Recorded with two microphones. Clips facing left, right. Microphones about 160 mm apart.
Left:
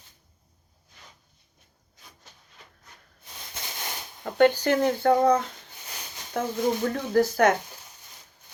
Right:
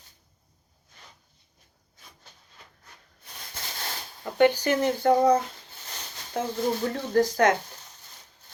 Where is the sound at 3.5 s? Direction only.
20° left (ahead or behind).